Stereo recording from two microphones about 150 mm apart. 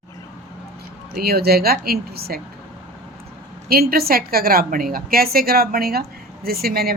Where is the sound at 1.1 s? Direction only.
90° right.